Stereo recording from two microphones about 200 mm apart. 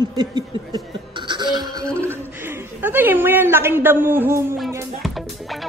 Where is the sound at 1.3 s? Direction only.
20° right (ahead or behind).